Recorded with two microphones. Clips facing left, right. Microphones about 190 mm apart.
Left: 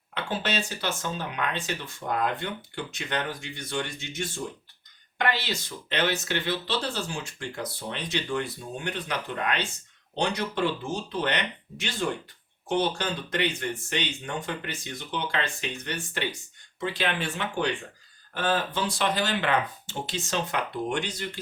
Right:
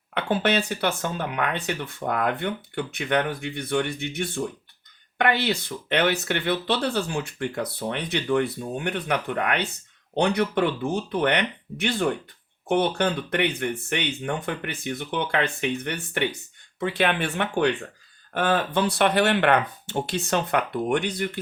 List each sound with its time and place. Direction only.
0.1 s speech: 60° right (ahead or behind)